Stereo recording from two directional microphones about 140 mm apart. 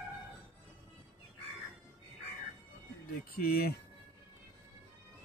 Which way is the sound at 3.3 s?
90° left.